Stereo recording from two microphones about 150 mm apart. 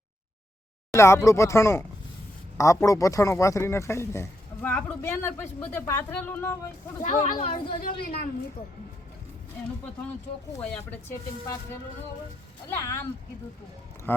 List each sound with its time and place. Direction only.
0.9 s speech: 20° left (ahead or behind)
7.0 s speech: 55° left (ahead or behind)
7.5 s a woman's voice: 70° left (ahead or behind)
12.6 s speech: 20° left (ahead or behind)
14.1 s speech: 15° left (ahead or behind)